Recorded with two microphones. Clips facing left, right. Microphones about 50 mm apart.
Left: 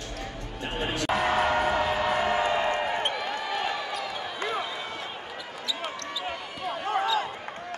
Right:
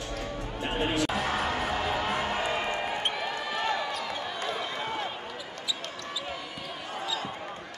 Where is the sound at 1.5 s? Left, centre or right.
Left.